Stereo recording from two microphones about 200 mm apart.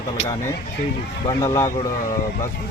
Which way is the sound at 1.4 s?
15° left (ahead or behind).